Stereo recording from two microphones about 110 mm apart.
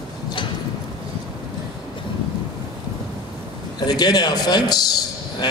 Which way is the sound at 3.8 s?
40° left (ahead or behind).